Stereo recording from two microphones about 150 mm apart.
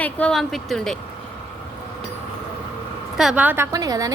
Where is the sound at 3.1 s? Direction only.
5° right (ahead or behind).